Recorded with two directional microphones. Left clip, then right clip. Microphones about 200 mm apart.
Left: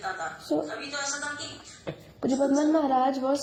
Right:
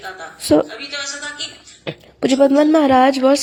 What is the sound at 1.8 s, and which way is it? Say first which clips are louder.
Speech: right 11 dB; 35° right (ahead or behind).